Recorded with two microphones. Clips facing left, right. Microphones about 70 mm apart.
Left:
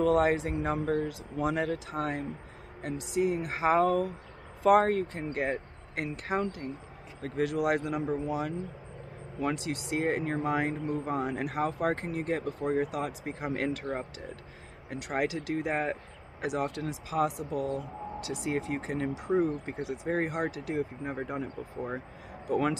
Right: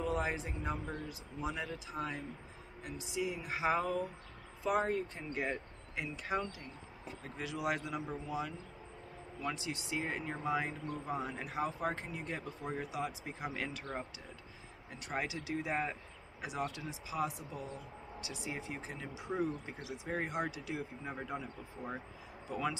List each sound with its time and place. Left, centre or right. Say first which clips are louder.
0.0 s speech: left 11 dB; left
3.2 s speech: left 8 dB; left
3.8 s speech: left 10 dB; left
4.6 s speech: left 10 dB; left
5.2 s speech: left 7 dB; left
7.2 s speech: left 13 dB; left
14.9 s speech: left 8 dB; left
19.0 s speech: left 8 dB; left
22.5 s speech: left 9 dB; left